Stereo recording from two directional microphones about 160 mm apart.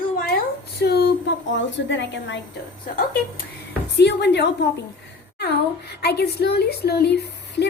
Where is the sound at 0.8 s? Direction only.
90° left.